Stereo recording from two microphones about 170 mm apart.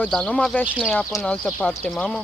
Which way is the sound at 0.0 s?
5° left (ahead or behind).